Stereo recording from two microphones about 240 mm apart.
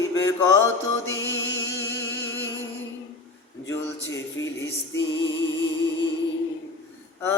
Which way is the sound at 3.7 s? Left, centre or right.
Centre.